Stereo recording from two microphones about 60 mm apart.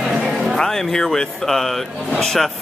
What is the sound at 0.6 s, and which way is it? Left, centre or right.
Speech, centre.